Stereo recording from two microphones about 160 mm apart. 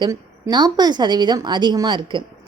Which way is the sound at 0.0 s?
25° right (ahead or behind).